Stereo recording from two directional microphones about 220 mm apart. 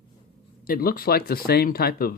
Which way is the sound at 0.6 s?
40° left (ahead or behind).